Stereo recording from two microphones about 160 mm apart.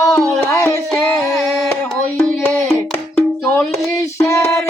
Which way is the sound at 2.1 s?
15° left (ahead or behind).